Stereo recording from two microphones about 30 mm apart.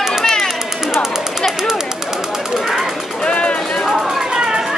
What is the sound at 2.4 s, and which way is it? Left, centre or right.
Speech, centre.